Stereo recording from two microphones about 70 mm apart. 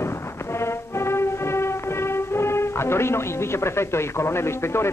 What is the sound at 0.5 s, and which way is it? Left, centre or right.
Music, left.